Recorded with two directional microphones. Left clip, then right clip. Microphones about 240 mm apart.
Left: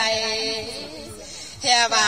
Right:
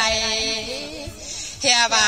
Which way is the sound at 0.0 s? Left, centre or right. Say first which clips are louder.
Right 2 dB; right.